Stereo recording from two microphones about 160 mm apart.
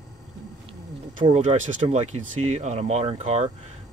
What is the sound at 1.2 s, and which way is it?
Speech, 45° right (ahead or behind).